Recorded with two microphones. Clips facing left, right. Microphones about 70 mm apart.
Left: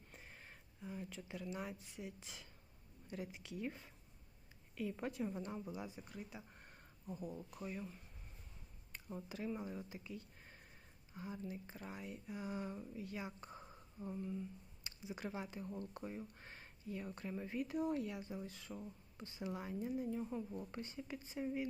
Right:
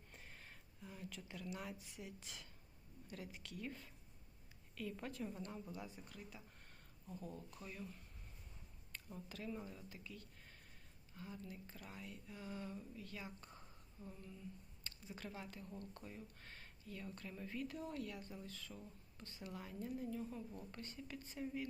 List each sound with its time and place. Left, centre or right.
0.1 s a woman's voice: centre
6.1 s a sound: centre
7.2 s a woman's voice: centre
20.8 s a woman's voice: centre
21.3 s speech: centre